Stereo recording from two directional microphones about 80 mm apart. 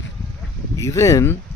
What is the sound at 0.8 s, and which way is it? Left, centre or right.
Speech, left.